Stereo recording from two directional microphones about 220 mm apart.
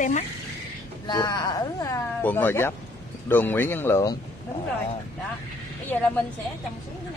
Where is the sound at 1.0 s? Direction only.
20° left (ahead or behind).